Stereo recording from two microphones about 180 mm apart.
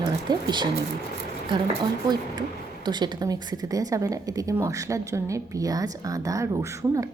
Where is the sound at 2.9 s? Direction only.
25° right (ahead or behind).